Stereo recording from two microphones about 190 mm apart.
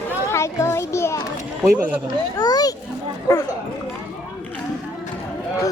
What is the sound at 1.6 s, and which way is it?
Speech, 10° right (ahead or behind).